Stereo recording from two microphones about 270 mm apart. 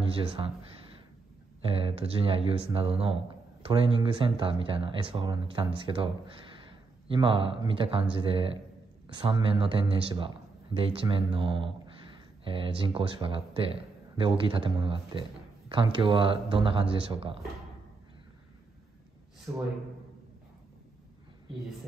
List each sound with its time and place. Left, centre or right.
0.0 s speech: right
1.6 s speech: right
7.1 s speech: centre
19.5 s speech: centre